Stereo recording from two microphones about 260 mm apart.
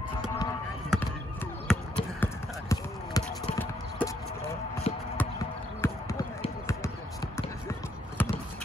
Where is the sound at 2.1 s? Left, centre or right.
Centre.